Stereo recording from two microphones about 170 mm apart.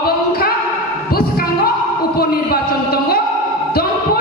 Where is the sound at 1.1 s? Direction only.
60° left (ahead or behind).